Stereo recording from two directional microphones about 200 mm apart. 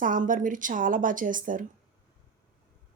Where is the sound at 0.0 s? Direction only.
40° right (ahead or behind).